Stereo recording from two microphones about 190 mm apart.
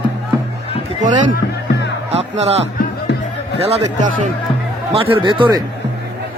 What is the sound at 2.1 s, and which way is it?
Speech, 35° right (ahead or behind).